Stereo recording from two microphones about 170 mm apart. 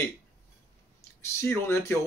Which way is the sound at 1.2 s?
15° left (ahead or behind).